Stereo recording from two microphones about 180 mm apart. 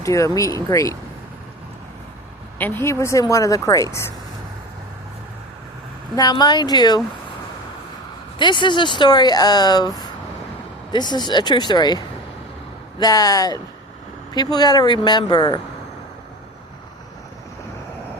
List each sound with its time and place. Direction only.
0.0 s a woman's voice: 15° left (ahead or behind)
2.6 s a woman's voice: 10° left (ahead or behind)
6.1 s speech: 20° left (ahead or behind)
8.4 s speech: 25° left (ahead or behind)